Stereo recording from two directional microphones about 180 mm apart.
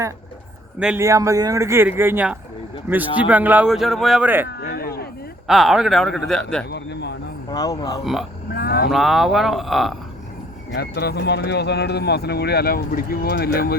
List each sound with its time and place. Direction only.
0.8 s a man's voice: 5° right (ahead or behind)
1.0 s speech: 15° right (ahead or behind)
4.4 s a sound: 60° left (ahead or behind)
5.5 s a man's voice: centre (ahead or behind)
6.7 s speech: 70° left (ahead or behind)
7.5 s speech: 20° left (ahead or behind)
8.0 s a man's voice: centre (ahead or behind)
8.5 s vehicle: 60° left (ahead or behind)
8.9 s a man's voice: centre (ahead or behind)
10.8 s speech: 65° left (ahead or behind)